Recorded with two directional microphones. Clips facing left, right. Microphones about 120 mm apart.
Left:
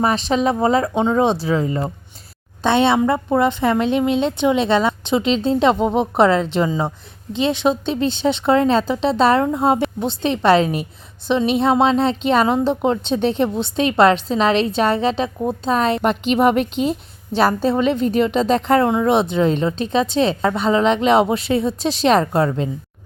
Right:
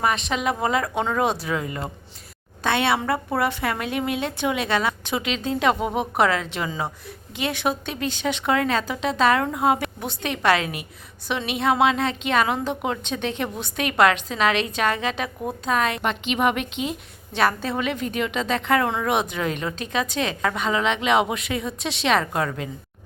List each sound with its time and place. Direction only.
0.0 s a woman's voice: 35° left (ahead or behind)